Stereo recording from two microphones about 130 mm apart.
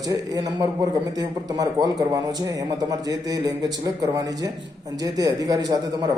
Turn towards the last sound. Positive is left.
turn(degrees=-30)  # may be behind; listen again after turning